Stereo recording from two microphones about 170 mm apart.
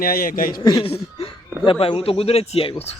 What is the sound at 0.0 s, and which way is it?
Speech, 60° left (ahead or behind).